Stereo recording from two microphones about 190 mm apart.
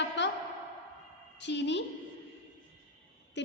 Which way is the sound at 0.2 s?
65° left (ahead or behind).